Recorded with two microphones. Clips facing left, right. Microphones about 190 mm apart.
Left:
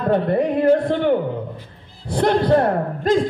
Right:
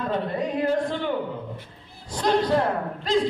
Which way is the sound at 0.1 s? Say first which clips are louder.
Left 10 dB; 60° left (ahead or behind).